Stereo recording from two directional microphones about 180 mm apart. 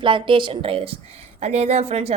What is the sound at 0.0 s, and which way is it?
A woman's voice, 25° right (ahead or behind).